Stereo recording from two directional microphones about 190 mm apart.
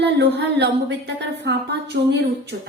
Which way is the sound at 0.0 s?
60° right (ahead or behind).